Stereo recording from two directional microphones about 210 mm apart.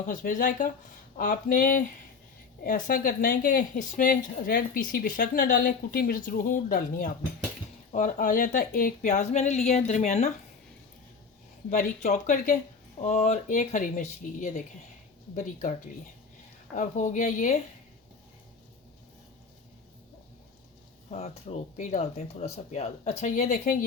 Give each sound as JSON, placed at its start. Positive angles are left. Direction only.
{"t": 0.0, "sound": "speech", "side_deg": 40}
{"t": 11.7, "sound": "speech", "side_deg": 35}
{"t": 16.7, "sound": "speech", "side_deg": 35}
{"t": 21.1, "sound": "speech", "side_deg": 30}